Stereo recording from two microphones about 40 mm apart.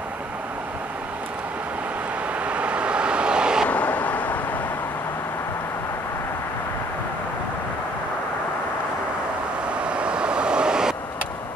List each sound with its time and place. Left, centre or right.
2.4 s vehicle: right
3.6 s vehicle: left
9.7 s vehicle: right